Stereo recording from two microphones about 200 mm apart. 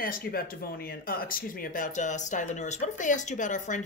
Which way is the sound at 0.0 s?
45° left (ahead or behind).